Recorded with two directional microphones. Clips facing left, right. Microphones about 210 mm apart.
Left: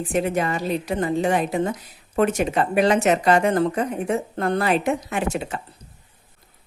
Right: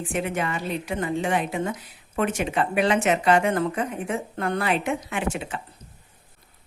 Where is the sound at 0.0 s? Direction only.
40° left (ahead or behind).